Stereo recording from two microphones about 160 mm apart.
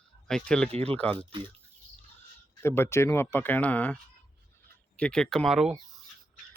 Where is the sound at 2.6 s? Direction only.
15° left (ahead or behind).